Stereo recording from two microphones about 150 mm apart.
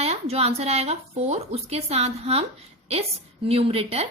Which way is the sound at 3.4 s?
40° right (ahead or behind).